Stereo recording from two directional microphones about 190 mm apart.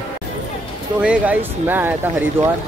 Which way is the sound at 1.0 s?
5° right (ahead or behind).